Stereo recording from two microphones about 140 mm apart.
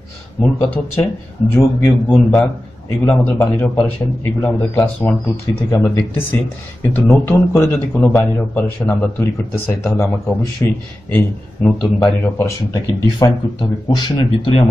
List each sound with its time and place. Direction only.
0.4 s a man's voice: 20° left (ahead or behind)
12.7 s speech: 30° left (ahead or behind)